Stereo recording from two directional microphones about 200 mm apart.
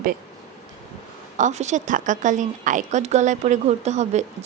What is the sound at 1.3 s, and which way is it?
A woman's voice, 35° right (ahead or behind).